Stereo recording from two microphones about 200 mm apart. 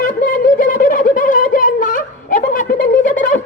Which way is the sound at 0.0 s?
40° left (ahead or behind).